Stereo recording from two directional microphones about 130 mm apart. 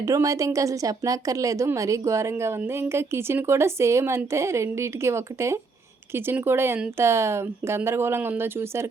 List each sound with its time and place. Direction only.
0.0 s a woman's voice: 25° right (ahead or behind)